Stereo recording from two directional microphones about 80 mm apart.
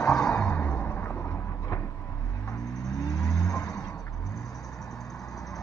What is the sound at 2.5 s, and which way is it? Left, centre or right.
Vehicle, left.